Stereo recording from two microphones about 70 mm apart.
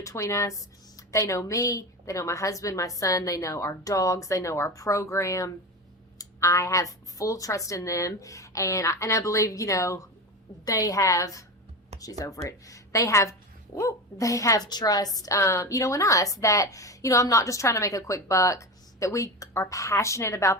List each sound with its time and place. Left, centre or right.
0.0 s a woman's voice: left
15.4 s a woman's voice: left